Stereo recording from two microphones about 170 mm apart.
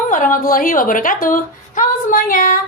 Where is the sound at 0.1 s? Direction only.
50° left (ahead or behind).